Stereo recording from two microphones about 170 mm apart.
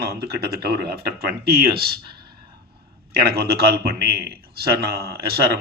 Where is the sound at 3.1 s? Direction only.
65° right (ahead or behind).